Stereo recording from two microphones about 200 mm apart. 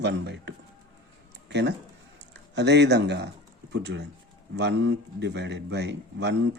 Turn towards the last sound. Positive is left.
turn(degrees=-60)  # may be behind; listen again after turning